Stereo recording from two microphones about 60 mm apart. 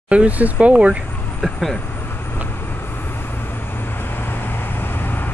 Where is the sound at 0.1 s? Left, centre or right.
Right.